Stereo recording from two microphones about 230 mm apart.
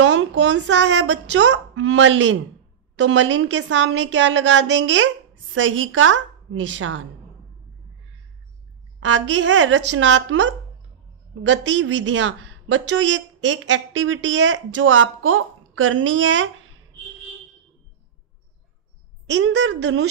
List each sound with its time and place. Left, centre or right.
0.0 s a woman's voice: right
9.0 s a woman's voice: right
19.2 s a woman's voice: right